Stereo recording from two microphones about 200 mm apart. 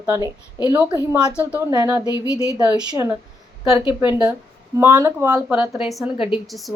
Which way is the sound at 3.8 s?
25° left (ahead or behind).